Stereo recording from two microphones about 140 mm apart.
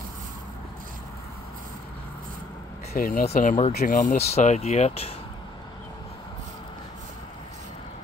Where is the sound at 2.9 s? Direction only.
90° left.